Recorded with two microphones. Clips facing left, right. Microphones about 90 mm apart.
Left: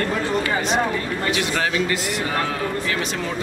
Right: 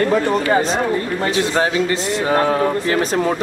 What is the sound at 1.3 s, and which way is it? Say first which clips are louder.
A man's voice: right 6 dB; 30° right (ahead or behind).